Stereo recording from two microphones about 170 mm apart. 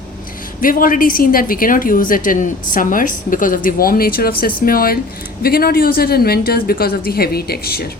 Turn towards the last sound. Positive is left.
turn(degrees=65)  # may be behind; listen again after turning